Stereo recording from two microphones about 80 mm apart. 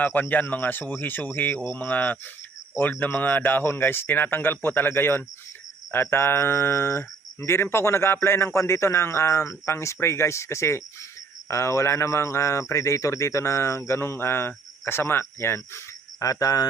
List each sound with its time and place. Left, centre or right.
0.0 s speech: left
16.2 s speech: left